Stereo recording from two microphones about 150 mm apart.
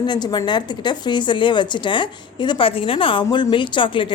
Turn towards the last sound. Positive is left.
turn(degrees=30)  # may be behind; listen again after turning